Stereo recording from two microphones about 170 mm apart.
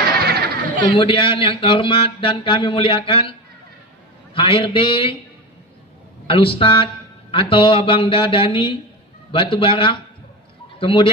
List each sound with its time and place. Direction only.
0.2 s music: 70° right (ahead or behind)
0.7 s speech: 30° left (ahead or behind)
6.2 s speech: 30° left (ahead or behind)